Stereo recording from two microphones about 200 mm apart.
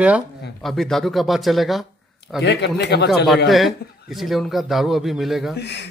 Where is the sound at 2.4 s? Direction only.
60° left (ahead or behind).